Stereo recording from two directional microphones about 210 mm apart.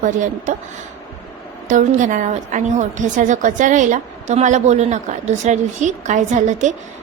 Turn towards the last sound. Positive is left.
turn(degrees=-35)  # may be behind; listen again after turning